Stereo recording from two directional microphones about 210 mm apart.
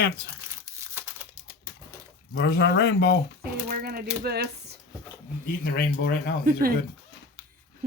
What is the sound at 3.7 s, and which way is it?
Speech, 45° right (ahead or behind).